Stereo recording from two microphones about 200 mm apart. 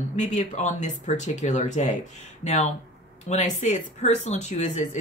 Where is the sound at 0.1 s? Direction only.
35° left (ahead or behind).